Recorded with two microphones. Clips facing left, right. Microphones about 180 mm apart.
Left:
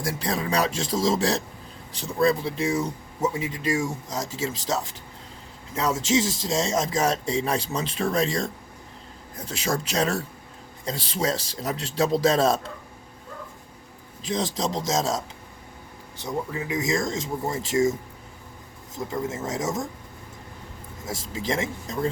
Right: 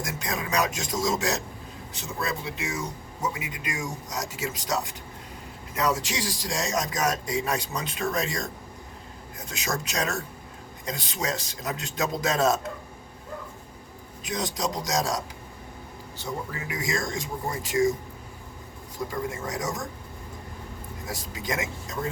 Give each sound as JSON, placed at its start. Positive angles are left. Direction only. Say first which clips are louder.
{"t": 0.0, "sound": "a man's voice", "louder": "left 4 dB", "side_deg": 30}
{"t": 14.3, "sound": "speech", "louder": "left 3 dB", "side_deg": 30}
{"t": 18.9, "sound": "speech", "louder": "left 2 dB", "side_deg": 25}
{"t": 21.1, "sound": "speech", "louder": "left 4 dB", "side_deg": 25}